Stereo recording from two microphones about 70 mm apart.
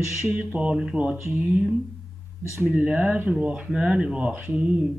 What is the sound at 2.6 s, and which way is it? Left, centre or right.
Speech, centre.